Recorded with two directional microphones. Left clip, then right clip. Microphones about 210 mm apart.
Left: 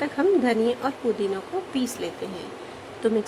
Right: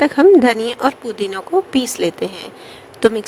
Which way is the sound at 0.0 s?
55° right (ahead or behind).